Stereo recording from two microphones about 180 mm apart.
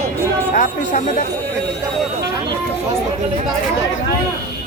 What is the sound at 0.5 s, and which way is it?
Speech, 45° left (ahead or behind).